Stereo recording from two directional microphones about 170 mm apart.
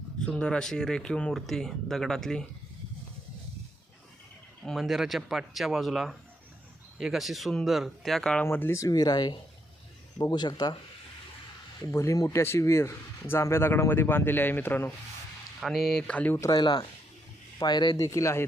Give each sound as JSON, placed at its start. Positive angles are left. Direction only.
{"t": 0.2, "sound": "speech", "side_deg": 5}
{"t": 4.6, "sound": "speech", "side_deg": 0}
{"t": 11.8, "sound": "speech", "side_deg": 15}
{"t": 15.6, "sound": "speech", "side_deg": 0}